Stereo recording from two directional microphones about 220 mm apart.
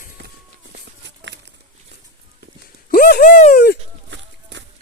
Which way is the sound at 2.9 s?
40° left (ahead or behind).